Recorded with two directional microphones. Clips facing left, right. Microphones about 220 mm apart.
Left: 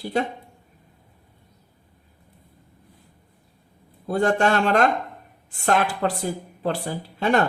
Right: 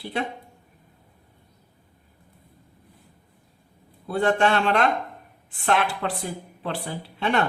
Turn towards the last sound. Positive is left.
turn(degrees=40)  # may be behind; listen again after turning